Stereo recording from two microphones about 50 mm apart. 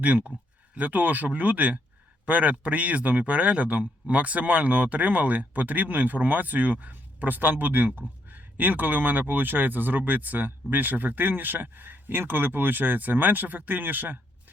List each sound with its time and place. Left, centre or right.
0.0 s speech: right